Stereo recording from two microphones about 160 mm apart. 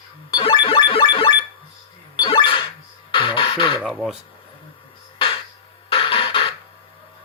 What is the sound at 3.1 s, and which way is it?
Music, 30° left (ahead or behind).